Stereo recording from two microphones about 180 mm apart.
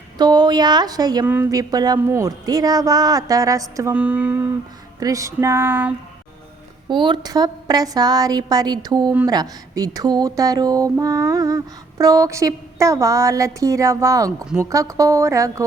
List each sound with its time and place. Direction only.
0.2 s speech: 25° right (ahead or behind)
6.8 s speech: 25° right (ahead or behind)